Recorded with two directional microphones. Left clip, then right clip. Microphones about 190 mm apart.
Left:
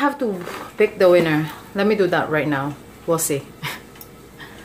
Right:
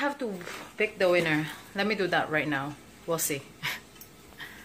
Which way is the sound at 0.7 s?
10° left (ahead or behind).